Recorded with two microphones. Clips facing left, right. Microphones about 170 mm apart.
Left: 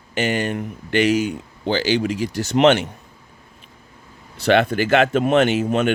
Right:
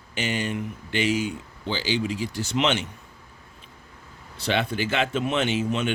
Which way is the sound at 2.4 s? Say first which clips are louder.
Left 10 dB; 60° left (ahead or behind).